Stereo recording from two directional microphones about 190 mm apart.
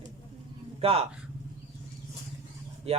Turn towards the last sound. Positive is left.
turn(degrees=-35)  # may be behind; listen again after turning